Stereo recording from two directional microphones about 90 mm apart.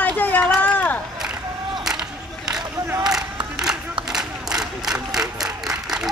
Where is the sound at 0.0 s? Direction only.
15° left (ahead or behind).